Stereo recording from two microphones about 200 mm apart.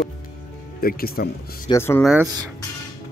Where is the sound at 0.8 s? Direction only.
50° left (ahead or behind).